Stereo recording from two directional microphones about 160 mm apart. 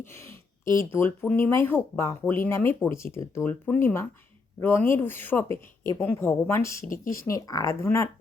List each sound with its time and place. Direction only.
0.0 s a sound: 15° left (ahead or behind)
0.9 s speech: 15° left (ahead or behind)
6.8 s speech: 60° left (ahead or behind)
7.1 s speech: 20° left (ahead or behind)